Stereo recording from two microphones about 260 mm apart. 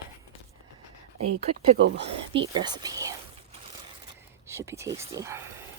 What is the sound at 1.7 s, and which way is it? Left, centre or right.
Speech, right.